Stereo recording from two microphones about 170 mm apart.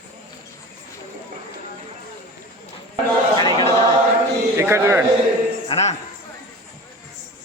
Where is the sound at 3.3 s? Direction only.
25° left (ahead or behind).